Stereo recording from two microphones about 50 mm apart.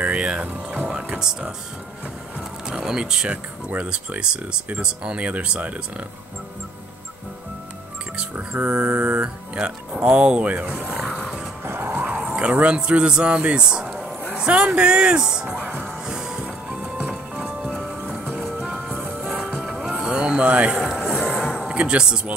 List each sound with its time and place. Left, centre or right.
0.1 s speech: right
0.8 s a sound: centre
2.7 s speech: centre
8.4 s speech: right
11.0 s music: centre
11.6 s music: right
12.2 s speech: right
14.3 s a sound: right
14.8 s speech: right
16.1 s music: centre
17.0 s music: right
17.6 s music: centre
19.6 s music: centre
20.8 s music: centre